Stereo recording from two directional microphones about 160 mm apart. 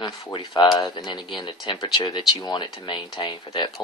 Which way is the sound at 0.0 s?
30° left (ahead or behind).